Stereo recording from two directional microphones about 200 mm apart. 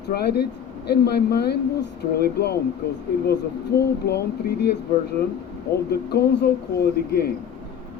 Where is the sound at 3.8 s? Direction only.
55° left (ahead or behind).